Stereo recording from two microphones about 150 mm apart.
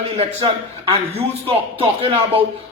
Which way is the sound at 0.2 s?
40° right (ahead or behind).